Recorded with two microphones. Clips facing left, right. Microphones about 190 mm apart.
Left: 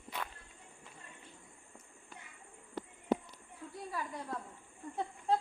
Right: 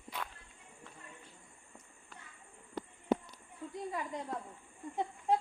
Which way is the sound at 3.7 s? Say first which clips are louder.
Right 2 dB; 20° right (ahead or behind).